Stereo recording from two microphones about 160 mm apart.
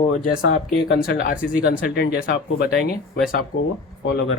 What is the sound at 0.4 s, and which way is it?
Speech, 75° left (ahead or behind).